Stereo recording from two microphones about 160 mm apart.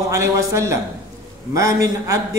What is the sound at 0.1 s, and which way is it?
A man's voice, 20° right (ahead or behind).